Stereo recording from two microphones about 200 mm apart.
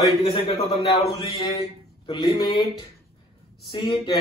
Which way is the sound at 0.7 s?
25° left (ahead or behind).